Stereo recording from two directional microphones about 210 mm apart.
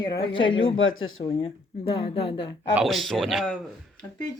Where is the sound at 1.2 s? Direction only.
25° left (ahead or behind).